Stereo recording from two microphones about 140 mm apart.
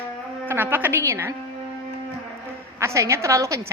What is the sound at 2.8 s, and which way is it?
Speech, 20° right (ahead or behind).